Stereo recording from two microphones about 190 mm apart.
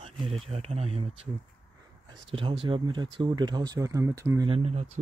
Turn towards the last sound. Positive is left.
turn(degrees=-35)  # may be behind; listen again after turning